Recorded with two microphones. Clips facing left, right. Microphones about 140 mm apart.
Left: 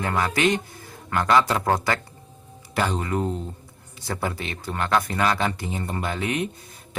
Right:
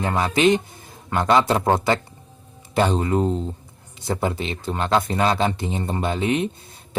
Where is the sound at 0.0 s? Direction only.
20° right (ahead or behind).